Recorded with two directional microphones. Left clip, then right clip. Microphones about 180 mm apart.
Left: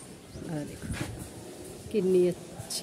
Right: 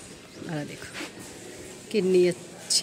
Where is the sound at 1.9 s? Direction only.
5° right (ahead or behind).